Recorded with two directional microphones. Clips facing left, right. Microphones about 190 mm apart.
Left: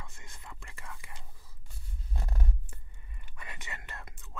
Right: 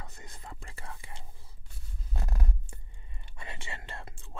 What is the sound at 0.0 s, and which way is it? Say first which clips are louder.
Whispering: right 3 dB; 40° right (ahead or behind).